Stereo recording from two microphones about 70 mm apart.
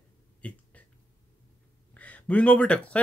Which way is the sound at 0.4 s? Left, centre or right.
Centre.